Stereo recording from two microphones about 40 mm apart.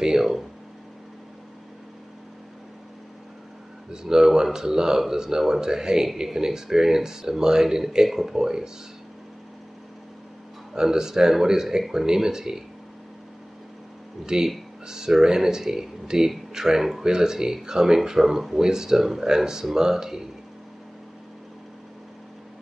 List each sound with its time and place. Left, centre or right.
0.0 s speech: centre
3.9 s speech: centre
10.7 s speech: centre
14.2 s speech: centre